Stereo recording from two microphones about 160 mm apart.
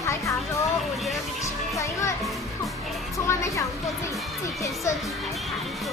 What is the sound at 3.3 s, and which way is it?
Speech, 20° left (ahead or behind).